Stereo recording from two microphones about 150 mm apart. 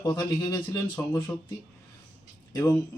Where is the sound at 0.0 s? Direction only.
25° left (ahead or behind).